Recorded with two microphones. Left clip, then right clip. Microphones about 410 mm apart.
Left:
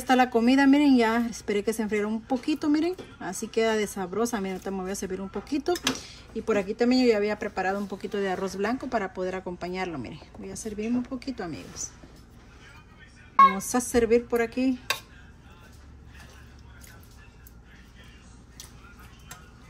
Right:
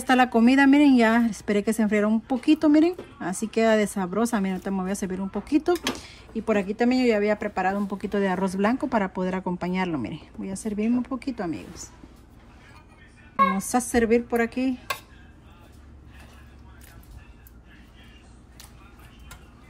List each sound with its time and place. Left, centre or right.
0.0 s a woman's voice: centre
13.6 s a woman's voice: centre